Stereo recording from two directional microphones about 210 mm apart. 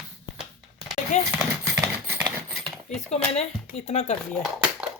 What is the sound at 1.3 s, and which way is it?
Clip-clop, 10° right (ahead or behind).